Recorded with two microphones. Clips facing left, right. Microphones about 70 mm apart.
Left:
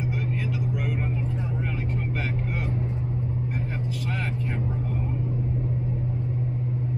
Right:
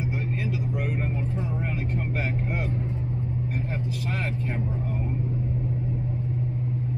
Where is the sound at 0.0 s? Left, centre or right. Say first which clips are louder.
Even; right.